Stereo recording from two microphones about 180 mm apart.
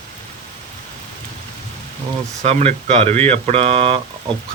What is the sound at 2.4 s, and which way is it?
Speech, 35° right (ahead or behind).